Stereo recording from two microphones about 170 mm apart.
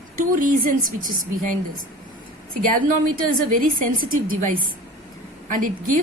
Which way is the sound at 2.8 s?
55° right (ahead or behind).